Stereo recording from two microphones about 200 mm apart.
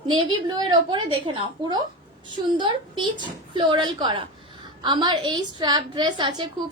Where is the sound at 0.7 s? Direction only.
25° right (ahead or behind).